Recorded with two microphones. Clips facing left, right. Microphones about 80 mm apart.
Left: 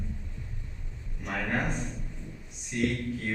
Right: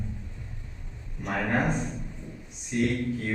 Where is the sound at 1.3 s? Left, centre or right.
Centre.